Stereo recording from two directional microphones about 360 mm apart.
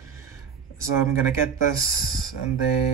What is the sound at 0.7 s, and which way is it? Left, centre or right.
Speech, centre.